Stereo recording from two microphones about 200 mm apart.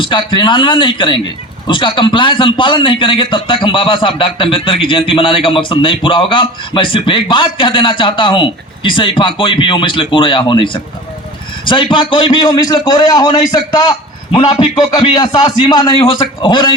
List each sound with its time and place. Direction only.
0.0 s a man's voice: 25° left (ahead or behind)